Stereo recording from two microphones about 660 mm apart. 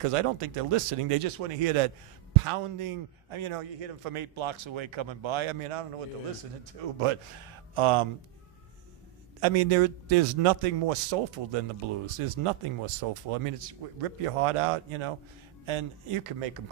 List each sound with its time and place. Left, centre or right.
0.0 s a man's voice: right
7.0 s a man's voice: right
9.4 s a man's voice: right